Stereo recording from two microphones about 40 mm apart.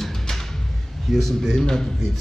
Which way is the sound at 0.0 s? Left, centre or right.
Centre.